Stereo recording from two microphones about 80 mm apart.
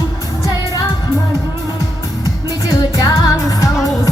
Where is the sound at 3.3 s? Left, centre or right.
Left.